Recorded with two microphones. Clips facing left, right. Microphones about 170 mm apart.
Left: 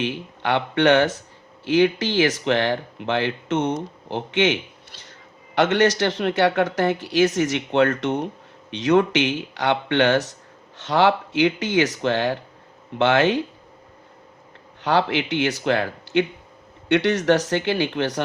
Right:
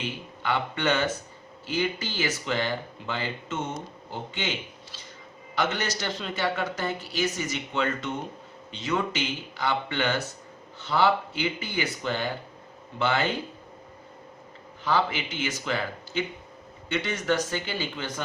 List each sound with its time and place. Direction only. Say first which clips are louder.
0.0 s speech: left 7 dB; 75° left (ahead or behind)
14.8 s speech: left 6 dB; 75° left (ahead or behind)